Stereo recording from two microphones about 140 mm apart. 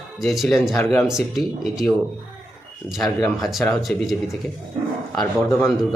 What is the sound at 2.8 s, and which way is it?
A man's voice, centre (ahead or behind).